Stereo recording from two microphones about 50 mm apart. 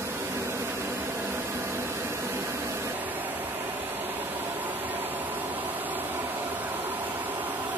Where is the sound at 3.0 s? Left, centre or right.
Right.